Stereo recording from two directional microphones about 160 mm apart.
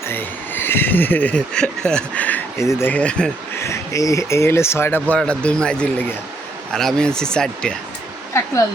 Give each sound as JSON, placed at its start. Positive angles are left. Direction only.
{"t": 0.0, "sound": "speech", "side_deg": 15}
{"t": 3.6, "sound": "speech", "side_deg": 20}